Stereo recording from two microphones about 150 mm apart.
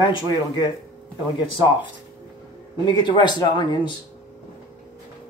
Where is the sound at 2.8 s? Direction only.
30° left (ahead or behind).